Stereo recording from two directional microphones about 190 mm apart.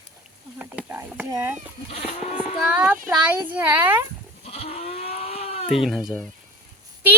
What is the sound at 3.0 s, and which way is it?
Speech, 10° right (ahead or behind).